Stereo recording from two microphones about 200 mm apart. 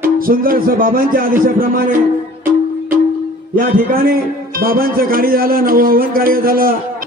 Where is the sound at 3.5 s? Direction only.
45° right (ahead or behind).